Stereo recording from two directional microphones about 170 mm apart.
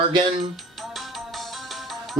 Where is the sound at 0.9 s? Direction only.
Centre (ahead or behind).